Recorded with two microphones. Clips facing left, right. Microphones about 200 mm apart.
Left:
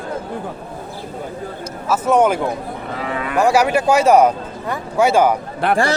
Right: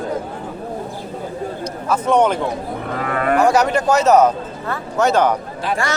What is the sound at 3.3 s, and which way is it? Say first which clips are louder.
Speech: left 1 dB; 10° left (ahead or behind).